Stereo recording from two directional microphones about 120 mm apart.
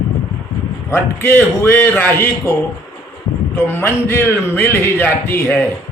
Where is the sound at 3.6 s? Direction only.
20° left (ahead or behind).